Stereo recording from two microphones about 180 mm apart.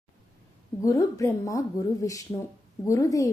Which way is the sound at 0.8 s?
20° left (ahead or behind).